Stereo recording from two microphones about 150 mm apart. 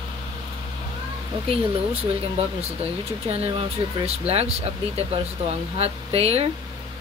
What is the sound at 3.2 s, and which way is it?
Speech, 40° right (ahead or behind).